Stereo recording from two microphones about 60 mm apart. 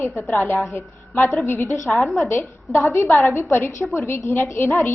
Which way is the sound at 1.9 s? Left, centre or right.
Centre.